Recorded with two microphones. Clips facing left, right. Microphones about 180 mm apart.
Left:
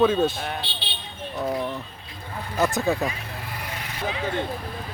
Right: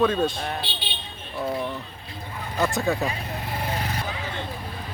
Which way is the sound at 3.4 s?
30° right (ahead or behind).